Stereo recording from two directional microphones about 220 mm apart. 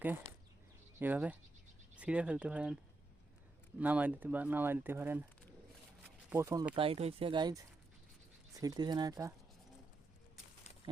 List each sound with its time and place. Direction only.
0.9 s speech: 10° right (ahead or behind)
3.8 s speech: 5° right (ahead or behind)
6.3 s speech: 15° right (ahead or behind)